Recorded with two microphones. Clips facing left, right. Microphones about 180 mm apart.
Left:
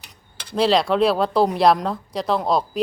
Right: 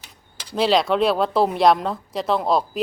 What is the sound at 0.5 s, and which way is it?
Speech, centre (ahead or behind).